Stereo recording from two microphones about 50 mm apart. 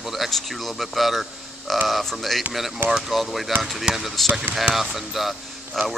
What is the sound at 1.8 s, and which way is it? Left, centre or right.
Speech, centre.